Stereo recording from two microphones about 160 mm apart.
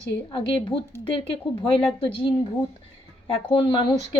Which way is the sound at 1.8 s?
30° left (ahead or behind).